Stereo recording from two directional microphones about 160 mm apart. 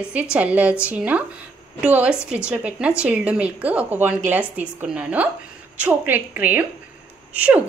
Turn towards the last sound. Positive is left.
turn(degrees=-10)  # may be behind; listen again after turning